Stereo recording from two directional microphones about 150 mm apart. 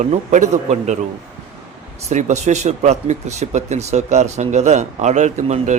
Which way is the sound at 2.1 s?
50° right (ahead or behind).